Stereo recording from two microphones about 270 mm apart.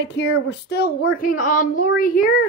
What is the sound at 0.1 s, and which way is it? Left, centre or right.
A woman's voice, left.